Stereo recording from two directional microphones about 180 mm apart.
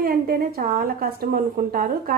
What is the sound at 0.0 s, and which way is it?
A woman's voice, 55° right (ahead or behind).